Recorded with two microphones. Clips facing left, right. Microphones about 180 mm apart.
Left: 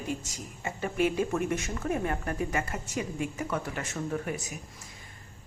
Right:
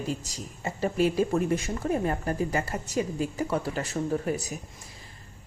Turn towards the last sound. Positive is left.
turn(degrees=-35)  # may be behind; listen again after turning